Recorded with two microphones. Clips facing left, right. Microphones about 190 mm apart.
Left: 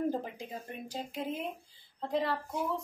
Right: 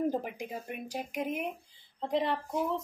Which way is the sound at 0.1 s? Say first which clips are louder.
Right 2 dB; 15° right (ahead or behind).